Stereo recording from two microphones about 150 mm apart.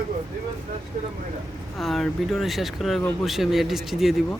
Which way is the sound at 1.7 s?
Centre (ahead or behind).